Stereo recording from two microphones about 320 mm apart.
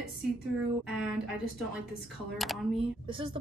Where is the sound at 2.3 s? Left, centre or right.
Centre.